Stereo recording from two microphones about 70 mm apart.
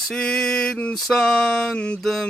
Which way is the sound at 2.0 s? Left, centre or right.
Centre.